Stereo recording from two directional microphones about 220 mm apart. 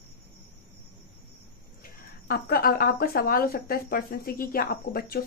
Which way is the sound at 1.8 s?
45° left (ahead or behind).